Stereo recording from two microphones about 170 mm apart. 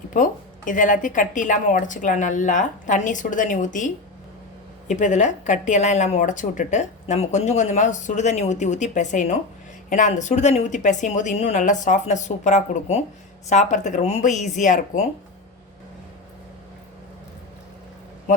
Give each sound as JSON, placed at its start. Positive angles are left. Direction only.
{"t": 0.1, "sound": "speech", "side_deg": 50}